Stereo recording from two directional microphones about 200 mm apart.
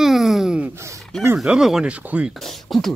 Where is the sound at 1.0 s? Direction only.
5° left (ahead or behind).